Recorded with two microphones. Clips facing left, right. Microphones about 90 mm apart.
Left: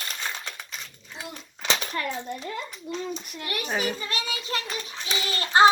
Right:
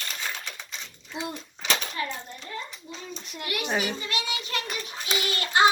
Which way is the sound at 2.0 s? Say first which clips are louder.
Left 3 dB; 60° left (ahead or behind).